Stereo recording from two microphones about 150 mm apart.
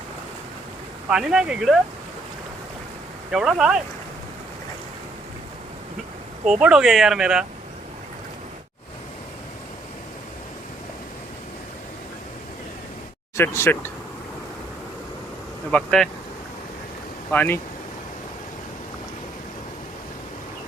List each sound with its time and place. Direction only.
1.1 s speech: 5° right (ahead or behind)
3.3 s speech: 5° right (ahead or behind)
6.4 s speech: 5° right (ahead or behind)
13.3 s speech: 20° left (ahead or behind)
15.7 s speech: 5° left (ahead or behind)
17.3 s speech: 10° left (ahead or behind)